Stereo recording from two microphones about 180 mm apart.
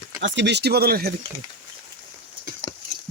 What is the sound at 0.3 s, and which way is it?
Speech, 70° right (ahead or behind).